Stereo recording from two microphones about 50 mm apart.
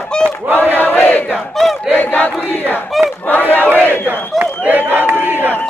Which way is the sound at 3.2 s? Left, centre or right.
Left.